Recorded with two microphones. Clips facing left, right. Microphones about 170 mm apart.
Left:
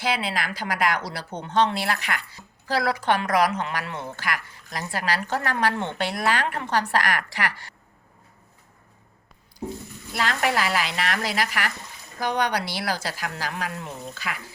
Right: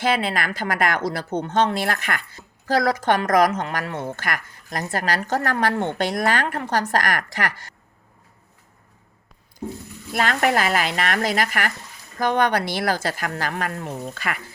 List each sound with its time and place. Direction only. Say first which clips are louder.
0.0 s a woman's voice: right 4 dB; 50° right (ahead or behind)
10.2 s a woman's voice: right 4 dB; 50° right (ahead or behind)